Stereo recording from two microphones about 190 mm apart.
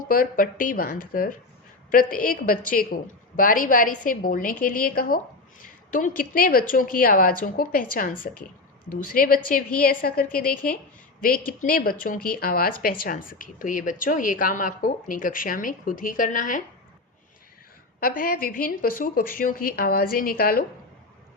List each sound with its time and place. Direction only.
0.0 s a woman's voice: 50° left (ahead or behind)
18.0 s a woman's voice: 50° left (ahead or behind)